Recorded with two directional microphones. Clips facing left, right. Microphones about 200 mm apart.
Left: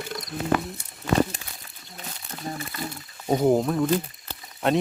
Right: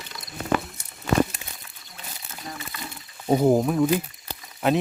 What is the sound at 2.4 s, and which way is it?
Crumpling, 40° left (ahead or behind).